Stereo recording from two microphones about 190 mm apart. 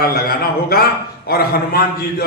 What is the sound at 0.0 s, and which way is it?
A man's voice, 55° left (ahead or behind).